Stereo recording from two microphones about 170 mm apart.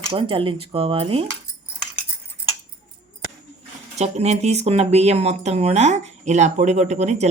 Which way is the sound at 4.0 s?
40° right (ahead or behind).